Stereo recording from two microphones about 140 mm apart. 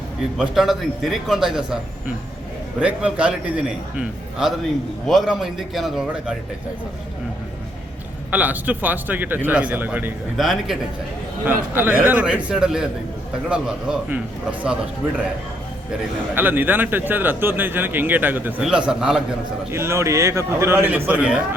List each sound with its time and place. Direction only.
0.3 s a man's voice: 5° right (ahead or behind)
8.3 s speech: 10° right (ahead or behind)
10.3 s a man's voice: centre (ahead or behind)
11.4 s speech: 15° right (ahead or behind)
16.3 s a man's voice: 15° right (ahead or behind)
19.7 s a man's voice: 20° right (ahead or behind)